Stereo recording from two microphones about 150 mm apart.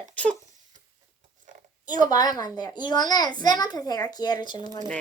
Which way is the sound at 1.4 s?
60° right (ahead or behind).